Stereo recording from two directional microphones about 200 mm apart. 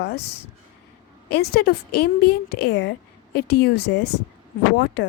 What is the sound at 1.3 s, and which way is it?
A woman's voice, 55° left (ahead or behind).